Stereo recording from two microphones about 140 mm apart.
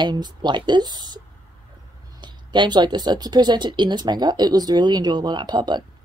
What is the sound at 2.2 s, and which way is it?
Speech, 30° right (ahead or behind).